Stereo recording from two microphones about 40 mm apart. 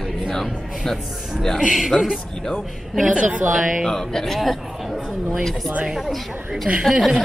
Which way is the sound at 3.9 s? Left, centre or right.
Centre.